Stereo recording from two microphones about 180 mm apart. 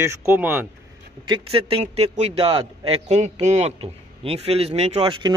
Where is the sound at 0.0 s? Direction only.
15° right (ahead or behind).